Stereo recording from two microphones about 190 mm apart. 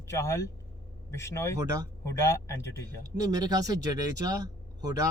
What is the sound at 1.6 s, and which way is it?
Speech, 20° right (ahead or behind).